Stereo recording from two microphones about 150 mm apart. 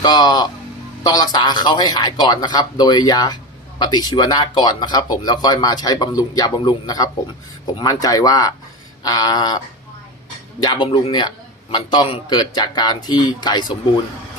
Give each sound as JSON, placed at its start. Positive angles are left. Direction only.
{"t": 0.0, "sound": "speech", "side_deg": 25}
{"t": 10.6, "sound": "speech", "side_deg": 30}